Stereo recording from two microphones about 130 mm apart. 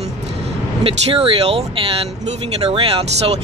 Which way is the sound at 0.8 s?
45° right (ahead or behind).